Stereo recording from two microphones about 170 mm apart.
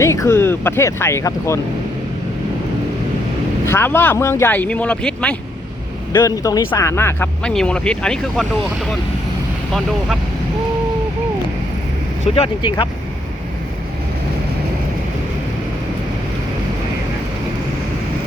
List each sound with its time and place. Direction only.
0.0 s speech: 15° left (ahead or behind)
3.7 s speech: 15° left (ahead or behind)
6.1 s speech: 20° left (ahead or behind)
12.3 s speech: 30° left (ahead or behind)